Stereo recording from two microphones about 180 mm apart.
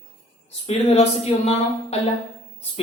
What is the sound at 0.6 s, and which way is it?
Speech, 35° left (ahead or behind).